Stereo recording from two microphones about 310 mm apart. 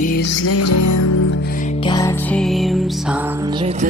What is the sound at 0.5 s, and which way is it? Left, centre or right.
Music, left.